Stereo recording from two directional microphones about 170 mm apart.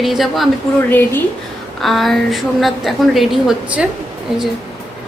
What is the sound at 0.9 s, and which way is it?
Speech, 10° left (ahead or behind).